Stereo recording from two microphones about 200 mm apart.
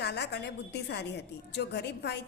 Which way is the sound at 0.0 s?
55° left (ahead or behind).